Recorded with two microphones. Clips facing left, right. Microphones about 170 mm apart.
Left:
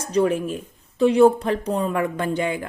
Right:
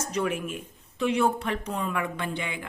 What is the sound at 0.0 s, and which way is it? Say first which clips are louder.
Speech: left 8 dB; 35° left (ahead or behind).